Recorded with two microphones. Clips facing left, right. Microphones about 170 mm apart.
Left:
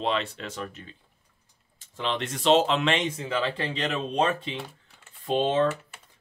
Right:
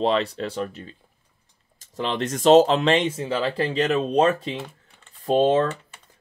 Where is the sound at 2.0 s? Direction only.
40° right (ahead or behind).